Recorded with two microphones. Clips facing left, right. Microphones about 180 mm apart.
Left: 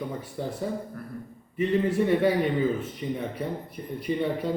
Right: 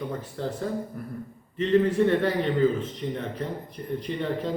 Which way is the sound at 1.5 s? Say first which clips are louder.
Right 3 dB; 10° left (ahead or behind).